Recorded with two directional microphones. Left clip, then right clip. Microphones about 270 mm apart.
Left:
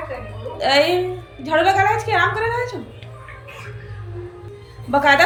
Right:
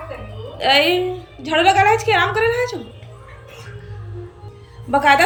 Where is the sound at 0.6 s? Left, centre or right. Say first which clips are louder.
Right 1 dB; centre.